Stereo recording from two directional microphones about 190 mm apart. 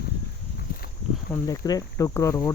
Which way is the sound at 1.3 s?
20° left (ahead or behind).